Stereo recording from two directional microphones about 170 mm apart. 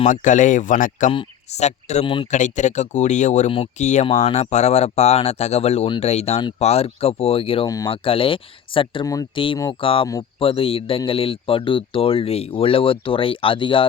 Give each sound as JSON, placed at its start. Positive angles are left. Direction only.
{"t": 0.0, "sound": "speech", "side_deg": 45}
{"t": 2.3, "sound": "speech", "side_deg": 45}
{"t": 7.7, "sound": "speech", "side_deg": 20}
{"t": 8.0, "sound": "speech", "side_deg": 30}